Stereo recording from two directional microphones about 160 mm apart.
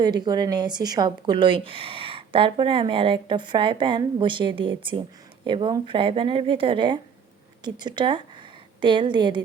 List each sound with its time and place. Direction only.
0.0 s a woman's voice: 25° right (ahead or behind)